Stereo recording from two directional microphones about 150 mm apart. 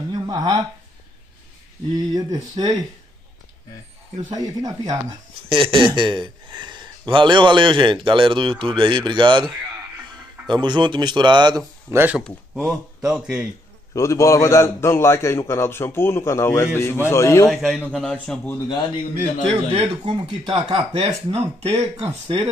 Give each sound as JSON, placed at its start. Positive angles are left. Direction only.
{"t": 0.1, "sound": "speech", "side_deg": -25}
{"t": 2.1, "sound": "speech", "side_deg": -25}
{"t": 4.3, "sound": "speech", "side_deg": -25}
{"t": 5.5, "sound": "speech", "side_deg": -35}
{"t": 10.5, "sound": "speech", "side_deg": -30}
{"t": 11.9, "sound": "speech", "side_deg": -15}
{"t": 12.5, "sound": "a man's voice", "side_deg": -5}
{"t": 13.9, "sound": "a man's voice", "side_deg": 20}
{"t": 17.5, "sound": "a man's voice", "side_deg": 0}
{"t": 18.7, "sound": "a man's voice", "side_deg": 30}
{"t": 19.5, "sound": "speech", "side_deg": -40}
{"t": 20.1, "sound": "speech", "side_deg": -30}
{"t": 20.5, "sound": "speech", "side_deg": -45}